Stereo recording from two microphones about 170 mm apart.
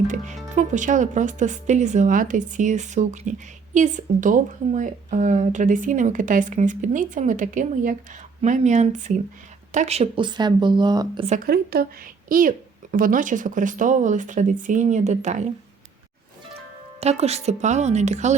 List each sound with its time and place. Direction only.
0.1 s speech: 45° right (ahead or behind); by 11.3 s 25° right (ahead or behind)
11.4 s speech: 65° right (ahead or behind)
12.3 s speech: 55° right (ahead or behind)
17.0 s a woman's voice: 40° right (ahead or behind)